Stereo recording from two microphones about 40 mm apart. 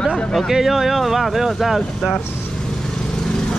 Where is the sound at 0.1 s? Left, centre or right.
Centre.